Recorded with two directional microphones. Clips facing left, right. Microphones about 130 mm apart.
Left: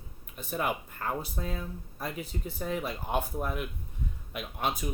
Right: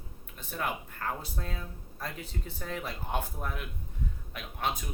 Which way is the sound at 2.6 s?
15° left (ahead or behind).